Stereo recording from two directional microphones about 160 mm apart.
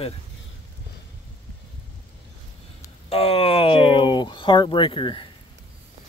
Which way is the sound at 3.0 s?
40° left (ahead or behind).